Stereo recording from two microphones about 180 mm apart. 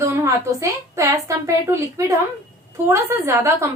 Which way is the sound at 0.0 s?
15° right (ahead or behind).